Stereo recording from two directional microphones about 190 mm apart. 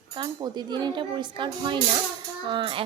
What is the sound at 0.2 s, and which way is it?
A child's voice, 20° right (ahead or behind).